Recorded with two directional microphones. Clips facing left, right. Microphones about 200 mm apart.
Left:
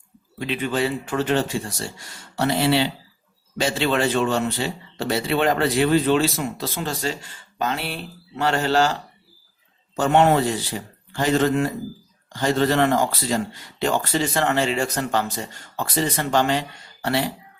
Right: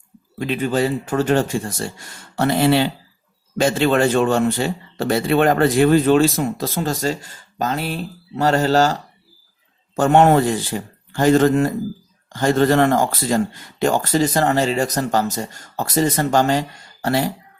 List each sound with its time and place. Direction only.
0.3 s speech: 45° right (ahead or behind)